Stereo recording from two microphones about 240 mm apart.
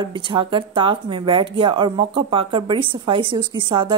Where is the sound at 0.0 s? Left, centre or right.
Right.